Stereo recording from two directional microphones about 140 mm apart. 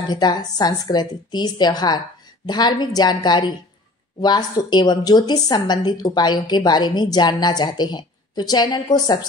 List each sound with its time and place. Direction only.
0.1 s a woman's voice: 30° left (ahead or behind)